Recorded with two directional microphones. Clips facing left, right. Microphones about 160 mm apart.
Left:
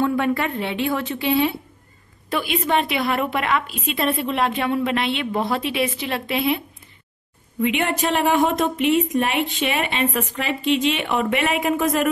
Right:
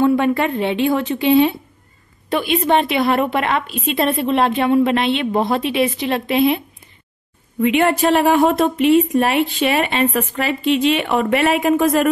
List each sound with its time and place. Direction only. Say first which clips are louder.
0.0 s a woman's voice: right 5 dB; 20° right (ahead or behind)
7.6 s a woman's voice: right 6 dB; 45° right (ahead or behind)